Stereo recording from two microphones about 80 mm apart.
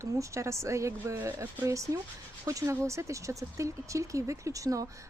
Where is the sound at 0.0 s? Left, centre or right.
Right.